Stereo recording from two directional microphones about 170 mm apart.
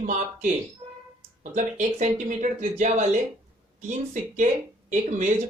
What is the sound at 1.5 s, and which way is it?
Speech, 45° right (ahead or behind).